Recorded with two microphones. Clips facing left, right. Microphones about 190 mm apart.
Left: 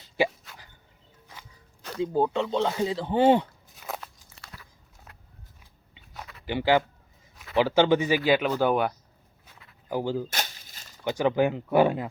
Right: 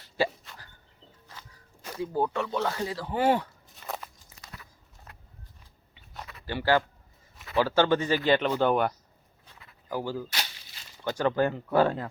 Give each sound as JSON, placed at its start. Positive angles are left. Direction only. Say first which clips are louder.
{"t": 2.0, "sound": "speech", "louder": "left 4 dB", "side_deg": 20}
{"t": 3.8, "sound": "biting", "louder": "left 1 dB", "side_deg": 0}
{"t": 6.4, "sound": "speech", "louder": "left 2 dB", "side_deg": 15}
{"t": 9.9, "sound": "speech", "louder": "left 4 dB", "side_deg": 20}
{"t": 10.2, "sound": "a sound", "louder": "left 3 dB", "side_deg": 45}
{"t": 11.0, "sound": "speech", "louder": "left 2 dB", "side_deg": 10}